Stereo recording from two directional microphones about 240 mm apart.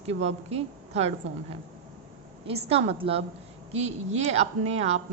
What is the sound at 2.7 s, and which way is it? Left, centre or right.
A woman's voice, right.